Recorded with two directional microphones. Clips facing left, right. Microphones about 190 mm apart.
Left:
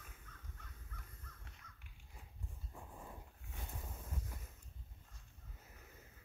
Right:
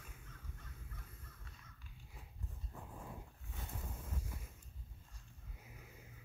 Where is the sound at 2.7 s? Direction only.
Centre (ahead or behind).